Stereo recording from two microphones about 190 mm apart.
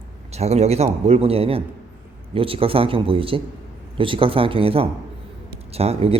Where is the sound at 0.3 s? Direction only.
35° right (ahead or behind).